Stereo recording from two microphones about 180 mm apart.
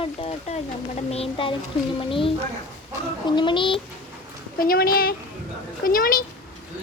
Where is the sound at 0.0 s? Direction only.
35° left (ahead or behind).